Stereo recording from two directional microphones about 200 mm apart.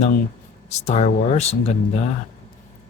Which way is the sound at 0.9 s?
35° left (ahead or behind).